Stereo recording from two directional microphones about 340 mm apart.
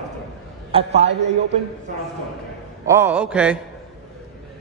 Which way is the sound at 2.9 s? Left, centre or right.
Centre.